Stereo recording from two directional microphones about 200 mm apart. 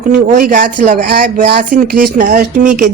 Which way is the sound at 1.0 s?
55° right (ahead or behind).